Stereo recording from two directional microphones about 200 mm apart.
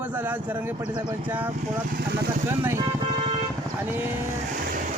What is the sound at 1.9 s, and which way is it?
Speech, 50° right (ahead or behind).